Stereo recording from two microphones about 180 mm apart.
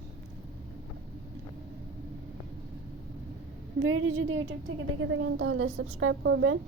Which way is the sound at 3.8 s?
90° right.